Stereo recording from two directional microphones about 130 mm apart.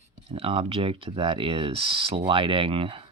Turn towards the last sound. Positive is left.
turn(degrees=-45)  # may be behind; listen again after turning